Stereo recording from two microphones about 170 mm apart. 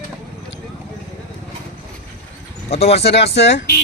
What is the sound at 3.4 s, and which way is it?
Speech, 90° left.